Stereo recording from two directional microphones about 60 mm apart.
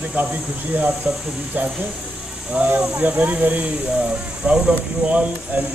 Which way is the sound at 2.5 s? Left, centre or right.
Right.